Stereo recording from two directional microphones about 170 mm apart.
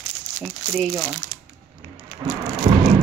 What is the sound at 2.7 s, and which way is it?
Vehicle, 35° right (ahead or behind).